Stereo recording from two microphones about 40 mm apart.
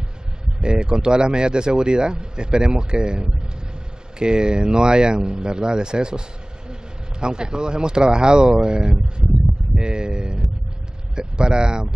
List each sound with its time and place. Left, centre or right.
0.6 s speech: right